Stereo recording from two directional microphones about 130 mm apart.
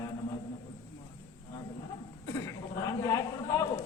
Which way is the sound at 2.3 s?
25° left (ahead or behind).